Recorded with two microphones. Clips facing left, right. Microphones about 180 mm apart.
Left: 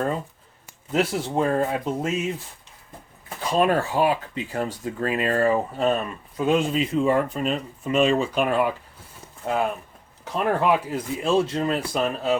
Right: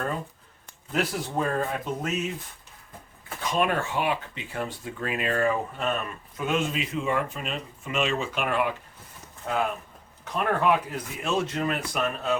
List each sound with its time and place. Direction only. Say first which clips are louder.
0.9 s speech: left 5 dB; 25° left (ahead or behind)
3.5 s speech: left 5 dB; 35° left (ahead or behind)